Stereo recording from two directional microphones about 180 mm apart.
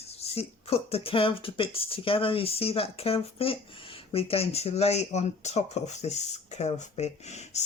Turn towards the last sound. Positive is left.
turn(degrees=40)  # may be behind; listen again after turning